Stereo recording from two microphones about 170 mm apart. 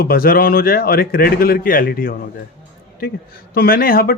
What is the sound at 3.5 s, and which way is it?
Speech, 60° left (ahead or behind).